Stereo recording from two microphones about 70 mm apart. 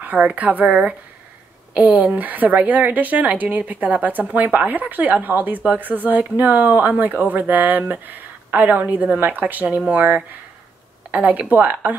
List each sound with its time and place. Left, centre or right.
0.0 s speech: right